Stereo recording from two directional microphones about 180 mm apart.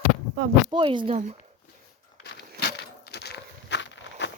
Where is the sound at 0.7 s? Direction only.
25° right (ahead or behind).